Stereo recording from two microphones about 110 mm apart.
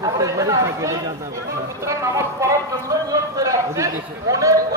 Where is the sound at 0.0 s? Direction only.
30° right (ahead or behind).